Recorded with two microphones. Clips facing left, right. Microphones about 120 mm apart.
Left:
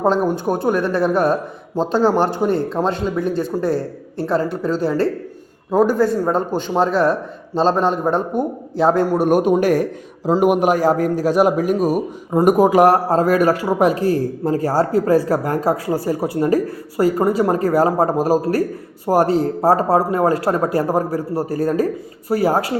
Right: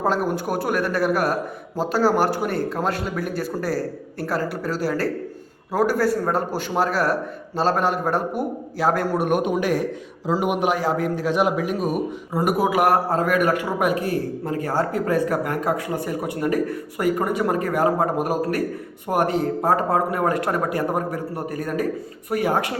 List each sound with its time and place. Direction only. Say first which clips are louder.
0.0 s a man's voice: left 5 dB; 25° left (ahead or behind)